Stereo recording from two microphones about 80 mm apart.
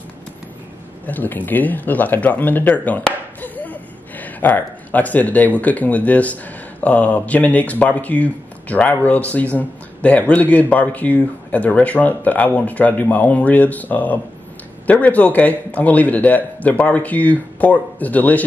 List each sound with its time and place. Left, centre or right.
1.0 s a man's voice: left